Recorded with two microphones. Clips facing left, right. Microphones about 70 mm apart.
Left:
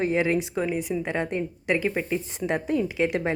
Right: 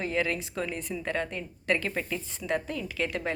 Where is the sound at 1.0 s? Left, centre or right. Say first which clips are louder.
Left 5 dB; left.